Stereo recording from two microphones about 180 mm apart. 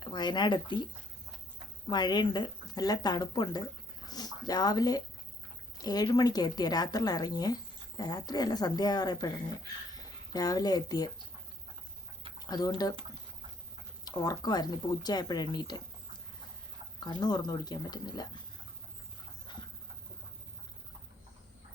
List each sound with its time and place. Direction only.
0.0 s a woman's voice: 25° left (ahead or behind)
1.9 s a woman's voice: 25° left (ahead or behind)
12.4 s speech: 20° left (ahead or behind)
14.0 s a woman's voice: 20° left (ahead or behind)
17.0 s a woman's voice: 25° left (ahead or behind)
19.5 s dog: 25° left (ahead or behind)